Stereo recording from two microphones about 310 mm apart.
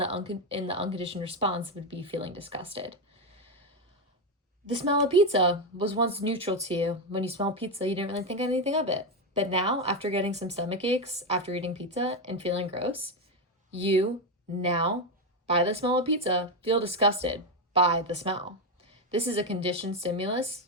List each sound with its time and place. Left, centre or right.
0.0 s speech: centre
4.8 s speech: centre